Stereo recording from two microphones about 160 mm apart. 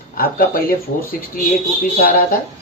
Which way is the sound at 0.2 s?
65° left (ahead or behind).